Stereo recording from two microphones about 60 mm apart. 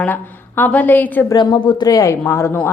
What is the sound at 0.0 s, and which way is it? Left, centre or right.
A woman's voice, left.